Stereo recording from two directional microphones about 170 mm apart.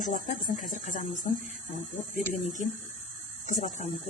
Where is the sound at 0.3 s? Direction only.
50° left (ahead or behind).